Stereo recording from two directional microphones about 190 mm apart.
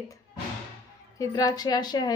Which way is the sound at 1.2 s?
20° left (ahead or behind).